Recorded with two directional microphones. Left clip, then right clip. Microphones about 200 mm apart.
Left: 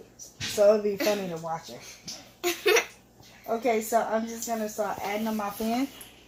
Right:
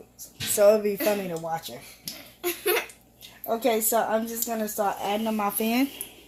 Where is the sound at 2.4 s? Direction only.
5° left (ahead or behind).